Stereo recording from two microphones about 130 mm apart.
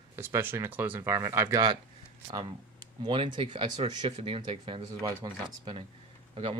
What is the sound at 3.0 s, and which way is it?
Speech, 40° right (ahead or behind).